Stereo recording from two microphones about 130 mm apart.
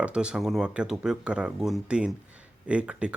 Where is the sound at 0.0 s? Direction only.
5° right (ahead or behind).